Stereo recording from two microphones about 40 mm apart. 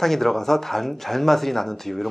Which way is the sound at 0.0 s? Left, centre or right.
Centre.